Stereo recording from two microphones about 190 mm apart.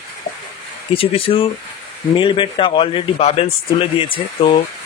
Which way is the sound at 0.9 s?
30° left (ahead or behind).